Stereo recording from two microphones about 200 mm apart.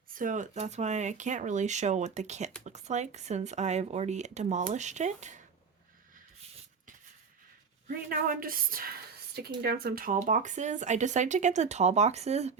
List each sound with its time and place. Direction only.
0.1 s speech: 40° right (ahead or behind)
7.9 s a woman's voice: 45° right (ahead or behind)